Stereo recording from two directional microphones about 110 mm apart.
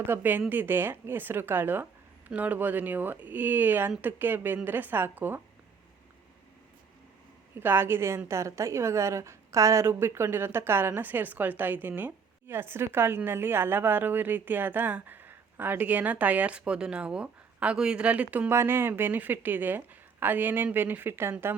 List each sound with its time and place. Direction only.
0.1 s a woman's voice: 15° right (ahead or behind)
7.5 s a woman's voice: 20° right (ahead or behind)